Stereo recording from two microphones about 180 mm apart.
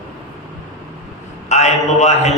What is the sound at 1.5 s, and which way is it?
Speech, 40° left (ahead or behind).